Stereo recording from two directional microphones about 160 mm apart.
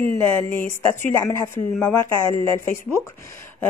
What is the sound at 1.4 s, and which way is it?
A woman's voice, 15° left (ahead or behind).